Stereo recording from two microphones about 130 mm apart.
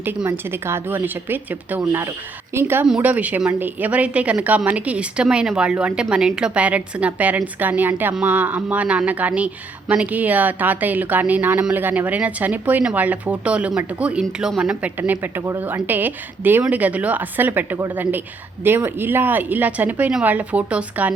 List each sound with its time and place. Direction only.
0.0 s speech: 15° right (ahead or behind)